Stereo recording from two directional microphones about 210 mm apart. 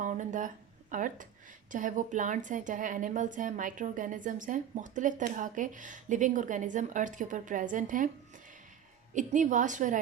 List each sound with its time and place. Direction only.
0.0 s a woman's voice: 35° right (ahead or behind)
9.1 s a woman's voice: 35° right (ahead or behind)